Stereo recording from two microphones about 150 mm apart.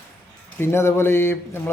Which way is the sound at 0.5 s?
15° left (ahead or behind).